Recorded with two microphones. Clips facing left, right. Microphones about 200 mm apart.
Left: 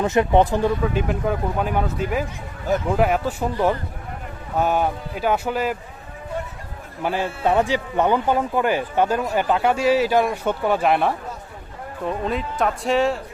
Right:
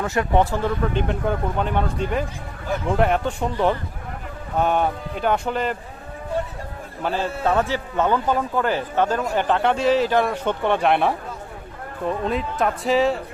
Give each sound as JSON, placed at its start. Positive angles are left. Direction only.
{"t": 0.0, "sound": "speech", "side_deg": 20}
{"t": 0.9, "sound": "speech", "side_deg": 5}
{"t": 7.0, "sound": "a man's voice", "side_deg": 15}